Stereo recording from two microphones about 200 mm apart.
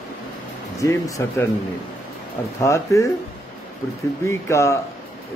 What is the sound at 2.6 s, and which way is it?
Speech, 15° left (ahead or behind).